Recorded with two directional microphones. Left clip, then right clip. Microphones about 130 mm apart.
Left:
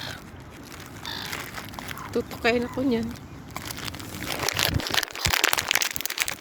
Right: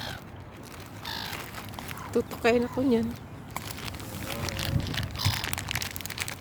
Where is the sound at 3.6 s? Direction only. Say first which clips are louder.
Left 4 dB; 60° left (ahead or behind); by 4.5 s 75° left (ahead or behind).